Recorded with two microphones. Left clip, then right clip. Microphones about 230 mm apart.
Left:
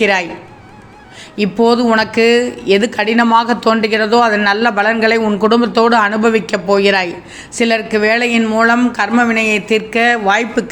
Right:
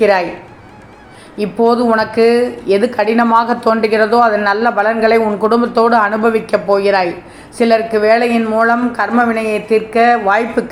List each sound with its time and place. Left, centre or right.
0.0 s speech: left
1.6 s speech: left